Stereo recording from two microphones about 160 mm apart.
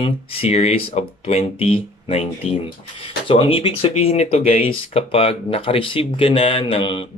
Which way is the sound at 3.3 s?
35° left (ahead or behind).